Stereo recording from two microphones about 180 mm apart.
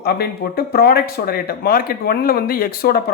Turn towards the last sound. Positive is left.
turn(degrees=60)  # may be behind; listen again after turning